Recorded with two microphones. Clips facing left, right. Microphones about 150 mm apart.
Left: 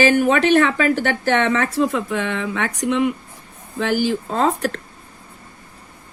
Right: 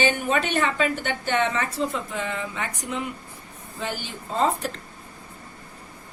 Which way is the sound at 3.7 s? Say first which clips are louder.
Left 13 dB; 90° left.